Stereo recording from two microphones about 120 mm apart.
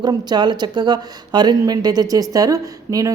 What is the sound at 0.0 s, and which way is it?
Speech, 35° right (ahead or behind).